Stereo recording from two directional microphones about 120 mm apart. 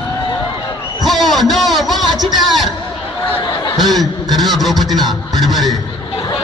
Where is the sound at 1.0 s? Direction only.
Centre (ahead or behind).